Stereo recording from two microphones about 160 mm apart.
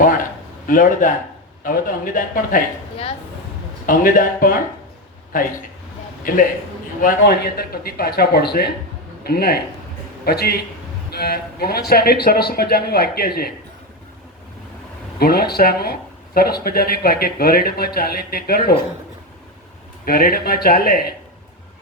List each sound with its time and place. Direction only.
0.0 s a sound: 60° left (ahead or behind)
0.7 s speech: 55° left (ahead or behind)
3.8 s speech: 60° left (ahead or behind)
7.0 s speech: 75° left (ahead or behind)
15.2 s speech: 75° left (ahead or behind)
20.1 s speech: 70° left (ahead or behind)